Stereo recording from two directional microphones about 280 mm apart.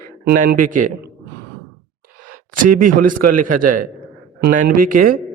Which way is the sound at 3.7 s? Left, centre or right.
Right.